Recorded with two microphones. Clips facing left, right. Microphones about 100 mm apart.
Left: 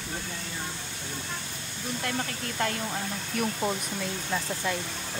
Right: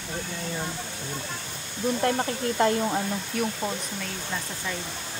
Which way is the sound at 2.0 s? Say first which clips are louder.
Right 6 dB; 30° right (ahead or behind).